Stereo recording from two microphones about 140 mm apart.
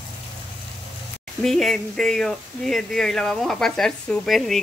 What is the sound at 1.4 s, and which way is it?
Speech, centre (ahead or behind).